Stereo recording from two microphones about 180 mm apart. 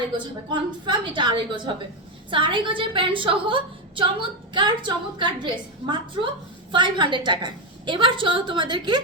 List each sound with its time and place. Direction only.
0.5 s a woman's voice: 25° right (ahead or behind)